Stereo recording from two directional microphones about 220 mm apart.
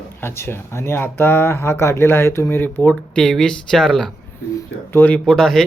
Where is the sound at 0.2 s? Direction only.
10° left (ahead or behind).